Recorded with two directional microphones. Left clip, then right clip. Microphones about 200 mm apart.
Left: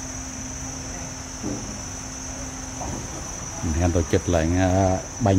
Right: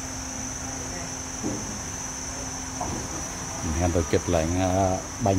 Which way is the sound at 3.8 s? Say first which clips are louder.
Left 2 dB; 15° left (ahead or behind).